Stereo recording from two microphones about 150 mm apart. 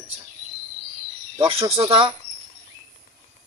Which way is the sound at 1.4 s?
35° right (ahead or behind).